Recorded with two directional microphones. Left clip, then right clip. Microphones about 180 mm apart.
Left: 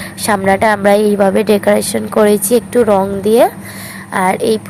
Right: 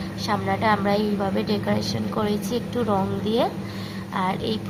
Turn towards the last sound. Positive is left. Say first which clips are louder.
# left 13 dB
turn(degrees=35)  # may be behind; listen again after turning